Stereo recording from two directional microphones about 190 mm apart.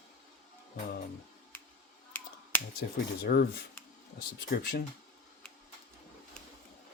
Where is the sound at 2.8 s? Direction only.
55° left (ahead or behind).